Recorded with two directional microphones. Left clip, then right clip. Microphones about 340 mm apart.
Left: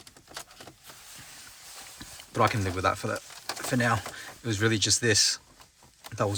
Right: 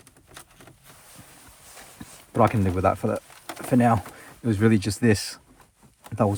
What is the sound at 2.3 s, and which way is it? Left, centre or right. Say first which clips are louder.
Speech: right 4 dB; centre.